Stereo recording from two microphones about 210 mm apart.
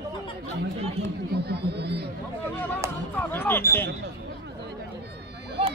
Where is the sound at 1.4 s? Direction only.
50° right (ahead or behind).